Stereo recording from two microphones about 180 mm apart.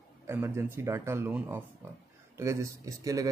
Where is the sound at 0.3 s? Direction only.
15° right (ahead or behind).